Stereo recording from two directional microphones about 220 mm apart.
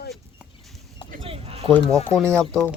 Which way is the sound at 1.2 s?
25° right (ahead or behind).